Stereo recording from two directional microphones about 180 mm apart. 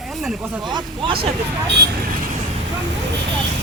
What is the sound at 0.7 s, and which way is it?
Speech, 25° right (ahead or behind).